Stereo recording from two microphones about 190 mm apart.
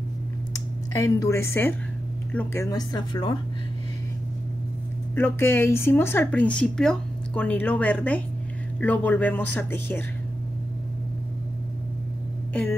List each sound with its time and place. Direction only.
0.9 s a woman's voice: 15° left (ahead or behind)
5.1 s speech: 10° left (ahead or behind)